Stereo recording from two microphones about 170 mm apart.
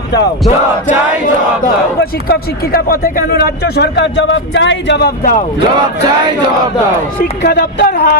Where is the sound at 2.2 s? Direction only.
65° left (ahead or behind).